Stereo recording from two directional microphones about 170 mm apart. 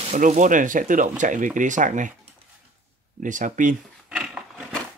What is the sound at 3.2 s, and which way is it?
Speech, 50° right (ahead or behind).